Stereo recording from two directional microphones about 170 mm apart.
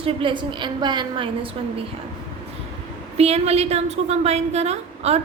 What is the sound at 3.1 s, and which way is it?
A woman's voice, 35° right (ahead or behind).